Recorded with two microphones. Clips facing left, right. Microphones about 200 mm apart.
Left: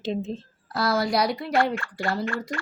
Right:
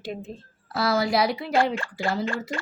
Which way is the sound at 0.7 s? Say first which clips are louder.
Right 1 dB; 5° right (ahead or behind).